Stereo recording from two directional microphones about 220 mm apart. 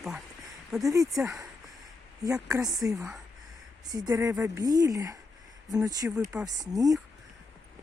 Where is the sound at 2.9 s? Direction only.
Centre (ahead or behind).